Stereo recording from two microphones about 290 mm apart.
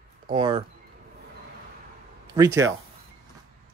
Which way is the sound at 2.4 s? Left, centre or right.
Centre.